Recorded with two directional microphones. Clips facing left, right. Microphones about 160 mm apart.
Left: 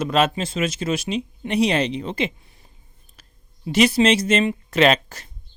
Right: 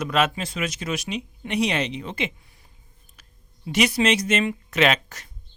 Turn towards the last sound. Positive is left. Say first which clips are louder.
# left 4 dB
turn(degrees=30)  # may be behind; listen again after turning